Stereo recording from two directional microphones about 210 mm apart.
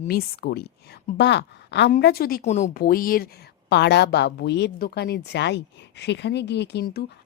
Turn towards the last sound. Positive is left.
turn(degrees=50)  # may be behind; listen again after turning